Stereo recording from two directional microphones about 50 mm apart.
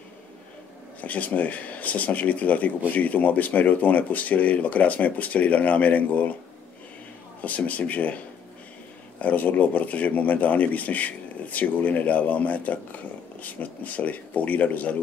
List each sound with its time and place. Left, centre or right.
1.0 s speech: left
7.4 s speech: left
9.2 s speech: left